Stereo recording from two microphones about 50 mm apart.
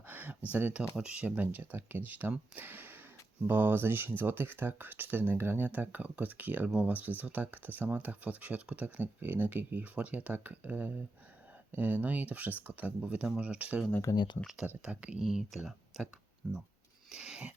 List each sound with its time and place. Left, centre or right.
0.1 s a sound: right
0.5 s speech: right
14.1 s speech: left
14.4 s speech: centre
14.8 s speech: right
15.2 s speech: centre
17.1 s speech: centre